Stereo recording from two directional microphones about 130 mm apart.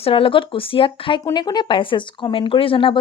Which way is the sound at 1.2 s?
30° left (ahead or behind).